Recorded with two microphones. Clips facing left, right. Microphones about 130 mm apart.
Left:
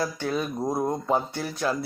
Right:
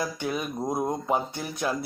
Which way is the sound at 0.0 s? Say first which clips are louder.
Left 2 dB; 15° right (ahead or behind).